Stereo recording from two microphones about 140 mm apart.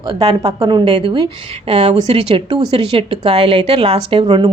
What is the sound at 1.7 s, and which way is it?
Speech, 50° right (ahead or behind).